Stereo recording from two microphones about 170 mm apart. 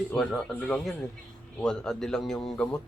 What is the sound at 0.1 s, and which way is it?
A man's voice, 5° left (ahead or behind).